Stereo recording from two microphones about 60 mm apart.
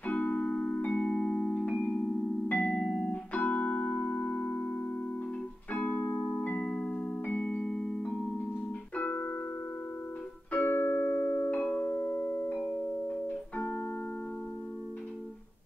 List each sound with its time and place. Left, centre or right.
0.0 s music: left
1.0 s music: centre
6.6 s music: centre
8.9 s music: left
10.5 s music: left
11.1 s music: left